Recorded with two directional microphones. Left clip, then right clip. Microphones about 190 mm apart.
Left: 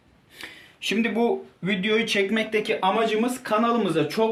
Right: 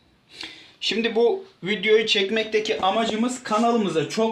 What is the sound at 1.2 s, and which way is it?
Speech, 35° right (ahead or behind).